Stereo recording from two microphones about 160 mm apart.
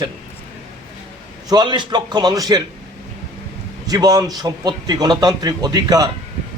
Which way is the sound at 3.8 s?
25° right (ahead or behind).